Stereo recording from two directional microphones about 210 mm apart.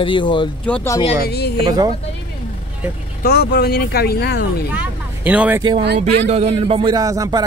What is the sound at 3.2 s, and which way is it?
Speech, 50° left (ahead or behind).